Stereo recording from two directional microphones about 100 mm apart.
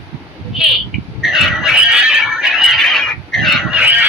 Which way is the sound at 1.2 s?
Centre (ahead or behind).